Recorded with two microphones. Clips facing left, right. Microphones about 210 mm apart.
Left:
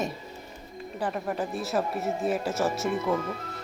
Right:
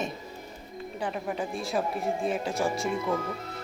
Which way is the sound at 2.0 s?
5° left (ahead or behind).